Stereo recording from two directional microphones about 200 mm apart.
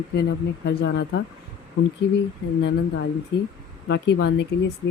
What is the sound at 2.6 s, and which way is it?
Speech, 60° left (ahead or behind).